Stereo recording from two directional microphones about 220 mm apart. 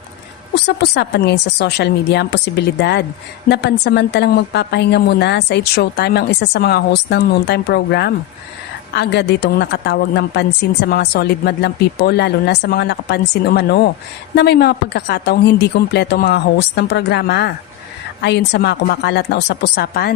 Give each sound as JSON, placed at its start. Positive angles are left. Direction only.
{"t": 0.5, "sound": "a woman's voice", "side_deg": 50}